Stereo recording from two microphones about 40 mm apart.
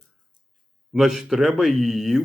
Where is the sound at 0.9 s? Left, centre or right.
Centre.